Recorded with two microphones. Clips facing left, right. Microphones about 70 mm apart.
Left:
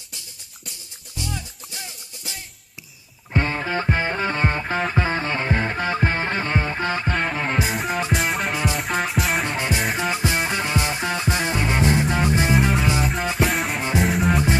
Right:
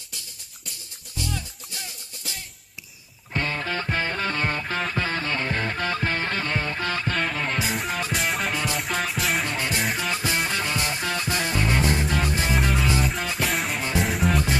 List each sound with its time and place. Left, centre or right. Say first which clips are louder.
1.1 s music: even; centre
3.3 s music: left 4 dB; left
7.2 s music: left 3 dB; centre
9.5 s music: left 3 dB; left
13.0 s music: left 4 dB; centre